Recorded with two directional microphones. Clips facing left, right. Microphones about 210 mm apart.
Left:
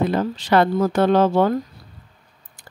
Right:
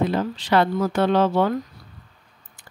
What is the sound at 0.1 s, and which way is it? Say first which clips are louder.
Speech: left 2 dB; 45° left (ahead or behind).